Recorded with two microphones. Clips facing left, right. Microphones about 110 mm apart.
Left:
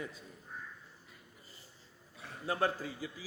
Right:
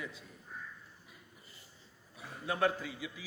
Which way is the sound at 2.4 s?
35° left (ahead or behind).